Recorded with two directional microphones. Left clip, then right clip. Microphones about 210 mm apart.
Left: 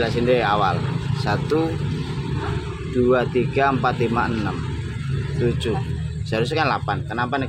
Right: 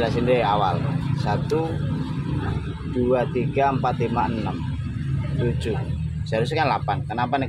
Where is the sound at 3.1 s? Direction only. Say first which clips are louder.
Left 2 dB; 15° left (ahead or behind).